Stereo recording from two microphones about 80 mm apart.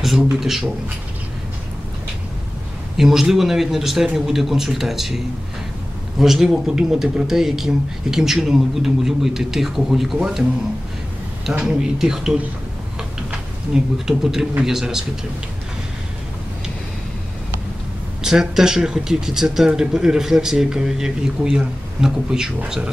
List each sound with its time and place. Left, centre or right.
0.3 s speech: centre
3.0 s speech: centre
11.4 s speech: centre
13.7 s speech: centre
18.2 s speech: centre